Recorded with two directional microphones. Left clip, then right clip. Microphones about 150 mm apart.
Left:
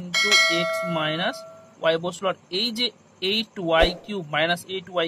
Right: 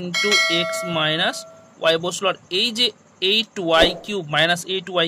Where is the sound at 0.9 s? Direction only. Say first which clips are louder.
Right 5 dB; 35° right (ahead or behind).